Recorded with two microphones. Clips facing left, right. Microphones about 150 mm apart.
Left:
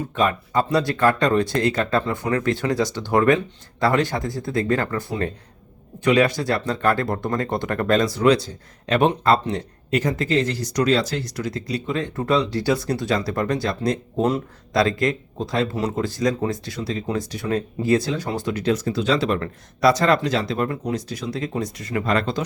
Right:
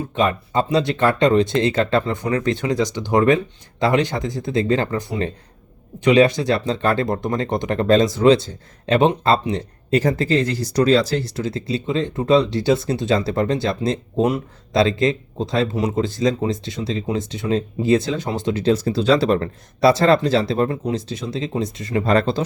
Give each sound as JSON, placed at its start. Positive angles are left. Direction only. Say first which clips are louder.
{"t": 0.1, "sound": "speech", "louder": "right 1 dB", "side_deg": -20}